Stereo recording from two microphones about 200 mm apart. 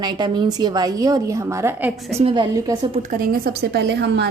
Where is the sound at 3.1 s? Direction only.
45° right (ahead or behind).